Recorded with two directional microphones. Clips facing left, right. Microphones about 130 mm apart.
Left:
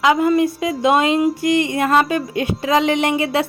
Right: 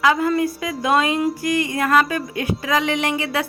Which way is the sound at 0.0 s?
20° left (ahead or behind).